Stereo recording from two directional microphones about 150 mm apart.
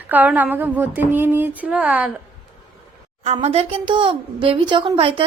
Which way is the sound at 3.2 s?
45° right (ahead or behind).